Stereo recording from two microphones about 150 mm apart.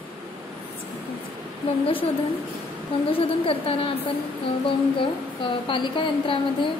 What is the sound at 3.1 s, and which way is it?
A woman's voice, 40° left (ahead or behind).